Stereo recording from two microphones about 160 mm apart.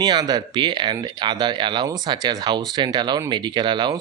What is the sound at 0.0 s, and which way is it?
Speech, 25° right (ahead or behind).